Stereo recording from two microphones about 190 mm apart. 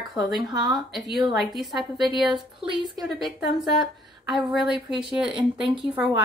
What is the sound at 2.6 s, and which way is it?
Speech, 25° right (ahead or behind).